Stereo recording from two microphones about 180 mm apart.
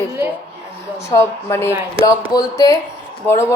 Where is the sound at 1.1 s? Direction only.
15° left (ahead or behind).